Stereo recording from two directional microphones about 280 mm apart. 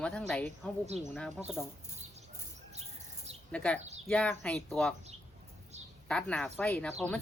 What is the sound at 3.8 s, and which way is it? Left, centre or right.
Speech, right.